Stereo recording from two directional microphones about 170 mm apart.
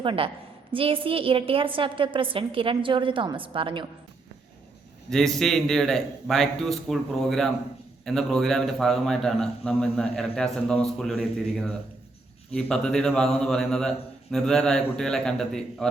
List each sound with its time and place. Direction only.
0.0 s a woman's voice: 30° right (ahead or behind)
5.1 s a man's voice: centre (ahead or behind)